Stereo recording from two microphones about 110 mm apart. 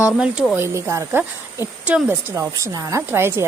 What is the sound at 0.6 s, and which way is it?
Speech, 25° right (ahead or behind).